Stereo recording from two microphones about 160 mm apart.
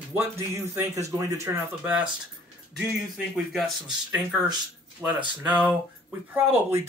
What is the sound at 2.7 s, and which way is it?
Speech, centre (ahead or behind).